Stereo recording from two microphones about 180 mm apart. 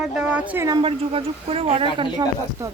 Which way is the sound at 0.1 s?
5° right (ahead or behind).